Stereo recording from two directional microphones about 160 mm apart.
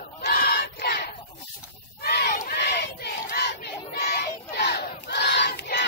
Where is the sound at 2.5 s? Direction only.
80° left.